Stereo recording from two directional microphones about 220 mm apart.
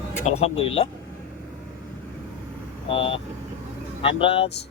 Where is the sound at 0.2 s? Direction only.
30° left (ahead or behind).